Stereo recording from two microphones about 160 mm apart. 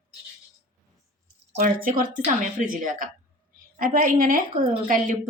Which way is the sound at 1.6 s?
55° right (ahead or behind).